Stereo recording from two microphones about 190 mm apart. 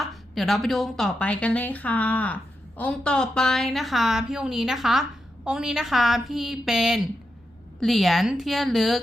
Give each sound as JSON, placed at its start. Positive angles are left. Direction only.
{"t": 0.0, "sound": "speech", "side_deg": 0}